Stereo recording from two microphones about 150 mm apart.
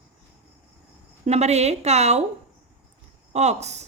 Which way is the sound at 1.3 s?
45° right (ahead or behind).